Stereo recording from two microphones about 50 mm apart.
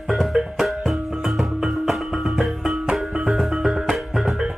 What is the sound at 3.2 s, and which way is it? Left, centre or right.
Music, centre.